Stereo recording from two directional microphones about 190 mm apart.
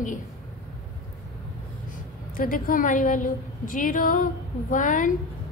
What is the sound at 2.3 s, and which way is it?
A woman's voice, 45° left (ahead or behind).